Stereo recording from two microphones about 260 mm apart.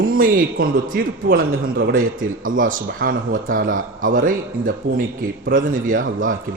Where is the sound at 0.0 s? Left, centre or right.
Right.